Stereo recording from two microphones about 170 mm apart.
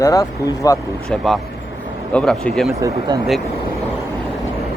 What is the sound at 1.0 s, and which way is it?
Speech, 5° left (ahead or behind).